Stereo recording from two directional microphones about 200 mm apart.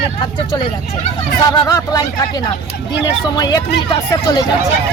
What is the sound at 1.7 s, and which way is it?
Speech, 15° left (ahead or behind).